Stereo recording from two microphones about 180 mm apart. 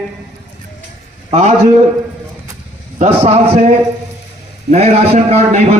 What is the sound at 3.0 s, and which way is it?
A man's voice, 35° right (ahead or behind).